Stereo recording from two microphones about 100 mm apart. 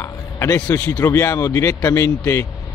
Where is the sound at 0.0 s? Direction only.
30° left (ahead or behind).